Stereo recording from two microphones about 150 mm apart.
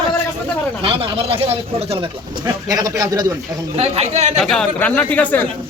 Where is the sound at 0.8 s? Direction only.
35° right (ahead or behind).